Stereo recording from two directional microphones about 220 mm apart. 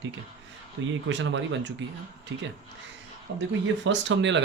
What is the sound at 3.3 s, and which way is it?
Speech, 55° right (ahead or behind).